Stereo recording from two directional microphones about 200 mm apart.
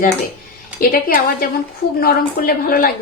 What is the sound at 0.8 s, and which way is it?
Speech, 45° left (ahead or behind).